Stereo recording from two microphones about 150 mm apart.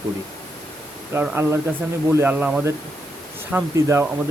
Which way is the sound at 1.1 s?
15° right (ahead or behind).